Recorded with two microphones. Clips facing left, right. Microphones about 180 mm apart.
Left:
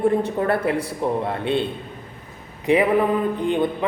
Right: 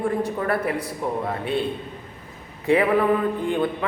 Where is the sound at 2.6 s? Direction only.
15° left (ahead or behind).